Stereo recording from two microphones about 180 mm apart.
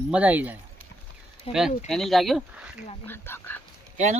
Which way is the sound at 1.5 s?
35° left (ahead or behind).